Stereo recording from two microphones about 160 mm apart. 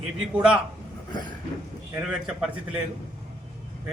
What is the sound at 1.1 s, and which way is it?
Vehicle, 25° left (ahead or behind).